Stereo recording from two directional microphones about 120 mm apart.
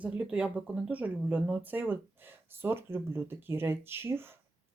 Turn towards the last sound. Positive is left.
turn(degrees=-20)  # may be behind; listen again after turning